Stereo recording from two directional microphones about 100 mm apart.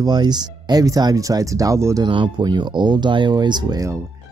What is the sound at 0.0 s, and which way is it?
Speech, 45° right (ahead or behind).